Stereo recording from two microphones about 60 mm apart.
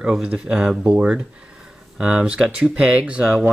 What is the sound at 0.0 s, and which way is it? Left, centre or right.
Speech, centre.